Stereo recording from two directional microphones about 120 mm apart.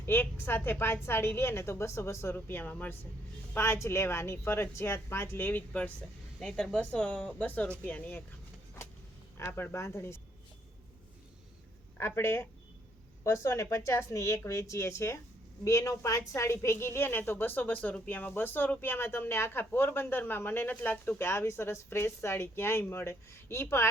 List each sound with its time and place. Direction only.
0.0 s a woman's voice: 15° left (ahead or behind)
9.4 s a woman's voice: 20° left (ahead or behind)
11.9 s a woman's voice: 20° left (ahead or behind)